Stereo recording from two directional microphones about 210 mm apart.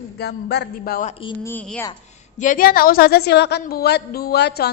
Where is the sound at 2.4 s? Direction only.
40° left (ahead or behind).